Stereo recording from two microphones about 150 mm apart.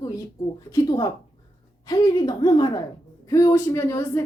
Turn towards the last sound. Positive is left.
turn(degrees=20)  # may be behind; listen again after turning